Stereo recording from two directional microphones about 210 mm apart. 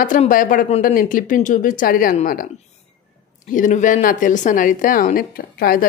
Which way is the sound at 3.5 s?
40° left (ahead or behind).